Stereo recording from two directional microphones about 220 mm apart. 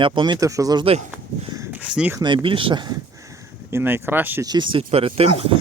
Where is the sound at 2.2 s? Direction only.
20° right (ahead or behind).